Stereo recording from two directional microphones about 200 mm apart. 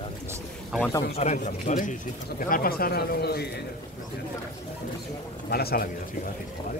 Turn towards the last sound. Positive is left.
turn(degrees=50)  # may be behind; listen again after turning